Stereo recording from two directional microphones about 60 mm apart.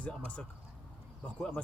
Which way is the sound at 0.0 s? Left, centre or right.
Left.